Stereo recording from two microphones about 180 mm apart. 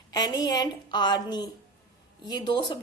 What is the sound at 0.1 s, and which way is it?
A woman's voice, 25° left (ahead or behind).